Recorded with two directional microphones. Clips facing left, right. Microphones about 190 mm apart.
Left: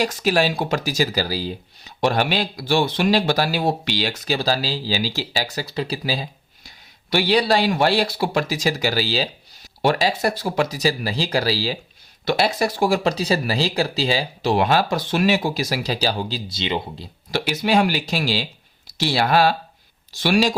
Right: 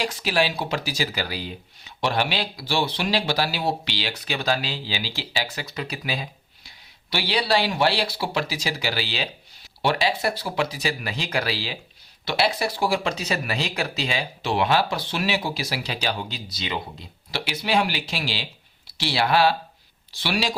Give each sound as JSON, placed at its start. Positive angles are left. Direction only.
{"t": 0.0, "sound": "speech", "side_deg": 45}
{"t": 7.1, "sound": "speech", "side_deg": 45}
{"t": 17.3, "sound": "speech", "side_deg": 45}